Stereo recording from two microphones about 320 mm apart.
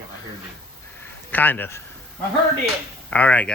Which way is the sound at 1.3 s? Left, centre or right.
Centre.